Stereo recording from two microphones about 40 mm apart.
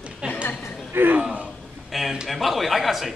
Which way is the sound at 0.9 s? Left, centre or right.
Right.